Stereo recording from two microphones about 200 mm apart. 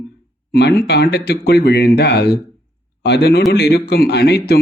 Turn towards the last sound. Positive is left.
turn(degrees=55)  # may be behind; listen again after turning